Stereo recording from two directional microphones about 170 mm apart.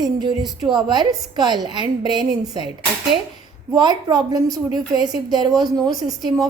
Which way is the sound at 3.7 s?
25° right (ahead or behind).